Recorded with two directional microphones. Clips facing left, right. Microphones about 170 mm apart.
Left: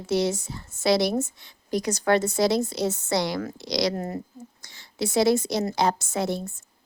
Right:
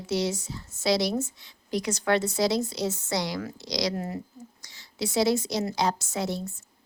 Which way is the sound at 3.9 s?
40° left (ahead or behind).